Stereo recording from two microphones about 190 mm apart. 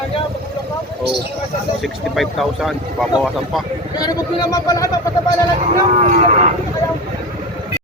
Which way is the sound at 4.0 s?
20° left (ahead or behind).